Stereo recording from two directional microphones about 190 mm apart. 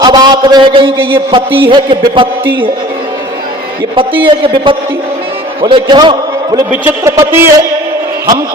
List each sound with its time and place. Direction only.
0.0 s a man's voice: 20° right (ahead or behind)
3.9 s a man's voice: 25° right (ahead or behind)